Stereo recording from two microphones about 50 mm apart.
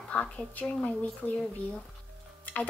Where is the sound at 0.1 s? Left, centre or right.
Left.